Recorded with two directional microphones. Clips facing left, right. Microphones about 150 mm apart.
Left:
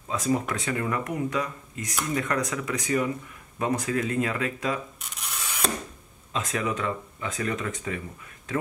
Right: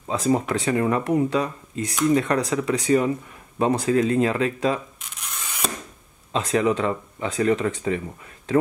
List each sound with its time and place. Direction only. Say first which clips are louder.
0.1 s speech: right 5 dB; 30° right (ahead or behind)
5.1 s rub: even; centre (ahead or behind)
6.3 s speech: right 8 dB; 30° right (ahead or behind)